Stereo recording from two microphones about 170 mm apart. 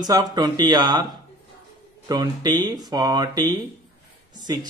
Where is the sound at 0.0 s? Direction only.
25° right (ahead or behind).